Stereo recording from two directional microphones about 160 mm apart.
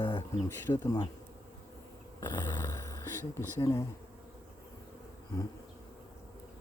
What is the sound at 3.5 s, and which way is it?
Speech, 20° left (ahead or behind).